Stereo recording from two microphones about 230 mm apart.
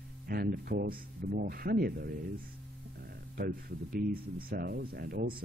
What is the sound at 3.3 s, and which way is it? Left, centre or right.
Speech, right.